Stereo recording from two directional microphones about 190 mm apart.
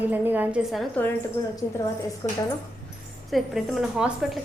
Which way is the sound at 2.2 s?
20° left (ahead or behind).